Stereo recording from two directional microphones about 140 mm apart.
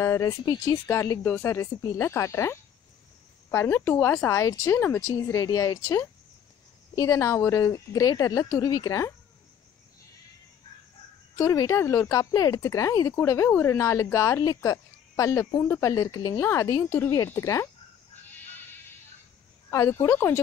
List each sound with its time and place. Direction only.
0.0 s speech: 25° left (ahead or behind)
11.3 s speech: 20° left (ahead or behind)
19.7 s speech: 20° left (ahead or behind)